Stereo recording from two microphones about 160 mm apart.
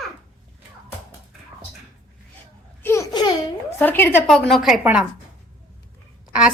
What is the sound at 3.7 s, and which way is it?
Speech, 10° left (ahead or behind).